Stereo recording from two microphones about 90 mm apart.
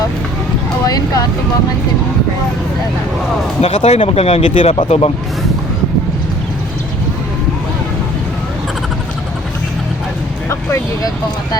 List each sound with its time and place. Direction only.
0.9 s vehicle: 45° left (ahead or behind)
3.6 s speech: 90° left
10.5 s speech: 35° left (ahead or behind)